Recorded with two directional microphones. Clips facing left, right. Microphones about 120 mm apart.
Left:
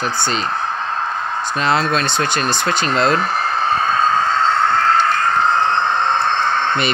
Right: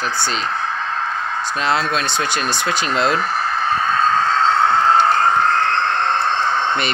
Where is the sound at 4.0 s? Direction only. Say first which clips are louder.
Even; 5° left (ahead or behind).